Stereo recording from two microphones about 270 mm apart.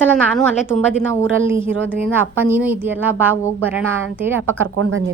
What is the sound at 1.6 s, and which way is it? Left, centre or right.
Speech, centre.